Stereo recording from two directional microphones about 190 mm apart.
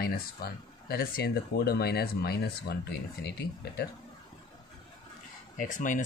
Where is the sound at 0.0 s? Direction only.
50° left (ahead or behind).